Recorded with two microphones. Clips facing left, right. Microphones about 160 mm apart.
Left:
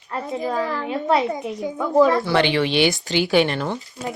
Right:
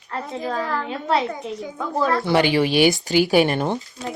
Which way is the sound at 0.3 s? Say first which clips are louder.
Left 1 dB; 10° left (ahead or behind).